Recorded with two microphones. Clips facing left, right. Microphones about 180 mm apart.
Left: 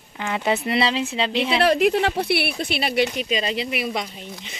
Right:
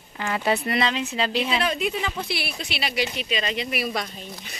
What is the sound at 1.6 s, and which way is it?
Speech, 70° left (ahead or behind).